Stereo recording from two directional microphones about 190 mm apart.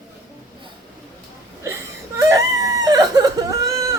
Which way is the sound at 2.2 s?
15° right (ahead or behind).